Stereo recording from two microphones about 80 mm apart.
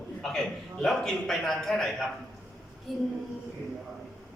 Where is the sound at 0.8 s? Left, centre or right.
Centre.